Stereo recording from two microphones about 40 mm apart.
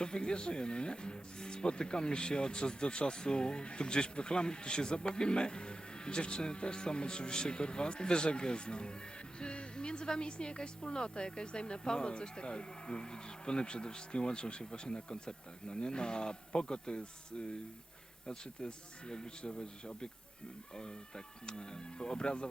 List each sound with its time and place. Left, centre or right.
0.0 s speech: left
21.4 s speech: left